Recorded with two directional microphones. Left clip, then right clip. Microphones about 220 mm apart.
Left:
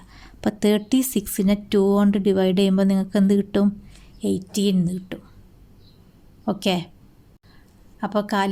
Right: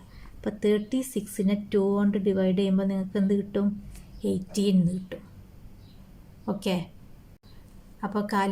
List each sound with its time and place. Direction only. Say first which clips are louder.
0.4 s a woman's voice: left 4 dB; 45° left (ahead or behind)
6.4 s a woman's voice: left 7 dB; 35° left (ahead or behind)
8.0 s a woman's voice: left 5 dB; 35° left (ahead or behind)